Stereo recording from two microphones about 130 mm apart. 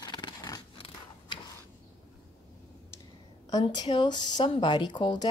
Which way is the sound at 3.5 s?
30° left (ahead or behind).